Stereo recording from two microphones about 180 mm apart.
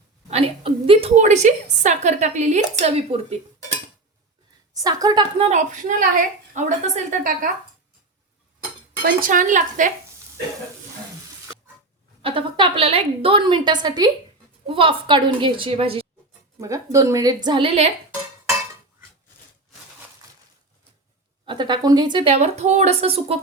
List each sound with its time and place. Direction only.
0.3 s a woman's voice: 35° right (ahead or behind)
4.7 s a woman's voice: 20° right (ahead or behind)
5.4 s a woman's voice: 40° right (ahead or behind)
9.0 s a woman's voice: 50° right (ahead or behind)
12.2 s a woman's voice: 30° right (ahead or behind)
16.6 s a woman's voice: 15° right (ahead or behind)
21.4 s a woman's voice: 25° right (ahead or behind)